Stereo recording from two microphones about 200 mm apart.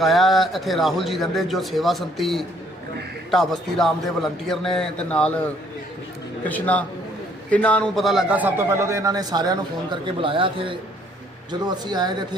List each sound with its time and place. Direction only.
0.0 s a man's voice: centre (ahead or behind)
6.5 s a man's voice: 5° left (ahead or behind); by 12.4 s 20° right (ahead or behind)